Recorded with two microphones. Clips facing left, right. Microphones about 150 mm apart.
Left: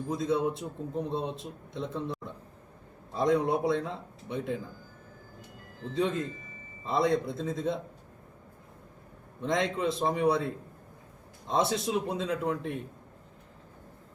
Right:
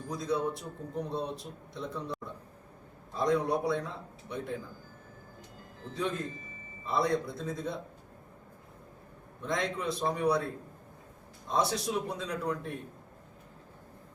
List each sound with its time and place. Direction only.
0.1 s speech: 20° left (ahead or behind)
3.2 s speech: 20° left (ahead or behind)
5.9 s speech: 20° left (ahead or behind)
9.4 s speech: 20° left (ahead or behind)